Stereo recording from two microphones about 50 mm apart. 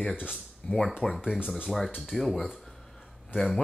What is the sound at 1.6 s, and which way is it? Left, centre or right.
Speech, centre.